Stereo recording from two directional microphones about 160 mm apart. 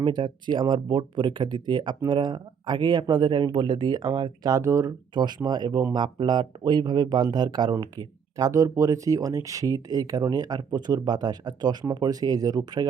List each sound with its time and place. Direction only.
0.0 s speech: 30° right (ahead or behind)